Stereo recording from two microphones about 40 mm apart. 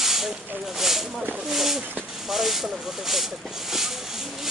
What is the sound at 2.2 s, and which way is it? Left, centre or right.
Hiss, centre.